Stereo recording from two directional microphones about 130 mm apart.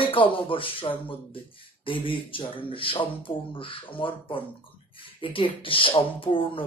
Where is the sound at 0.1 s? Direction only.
40° left (ahead or behind).